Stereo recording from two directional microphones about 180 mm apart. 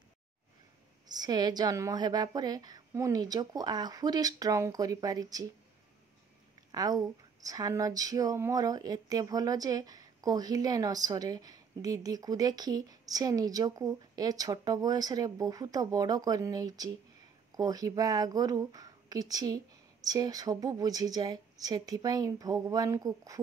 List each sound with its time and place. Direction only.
1.0 s speech: 20° right (ahead or behind)
6.7 s speech: 20° right (ahead or behind)